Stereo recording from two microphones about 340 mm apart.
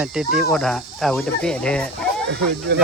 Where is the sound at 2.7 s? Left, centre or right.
Right.